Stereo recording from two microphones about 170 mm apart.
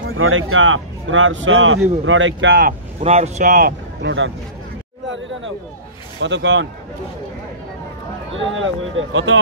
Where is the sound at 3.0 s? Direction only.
40° right (ahead or behind).